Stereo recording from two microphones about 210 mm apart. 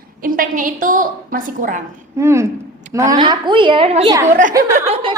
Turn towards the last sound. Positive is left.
turn(degrees=-30)  # may be behind; listen again after turning